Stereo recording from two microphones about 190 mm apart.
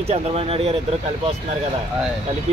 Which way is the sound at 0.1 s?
30° right (ahead or behind).